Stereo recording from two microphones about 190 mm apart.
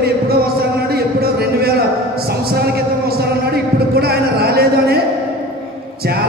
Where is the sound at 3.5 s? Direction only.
55° right (ahead or behind).